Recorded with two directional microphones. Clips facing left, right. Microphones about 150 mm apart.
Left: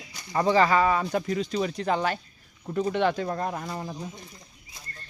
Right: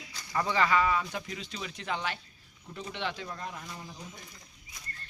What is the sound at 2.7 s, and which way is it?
Speech, 60° left (ahead or behind).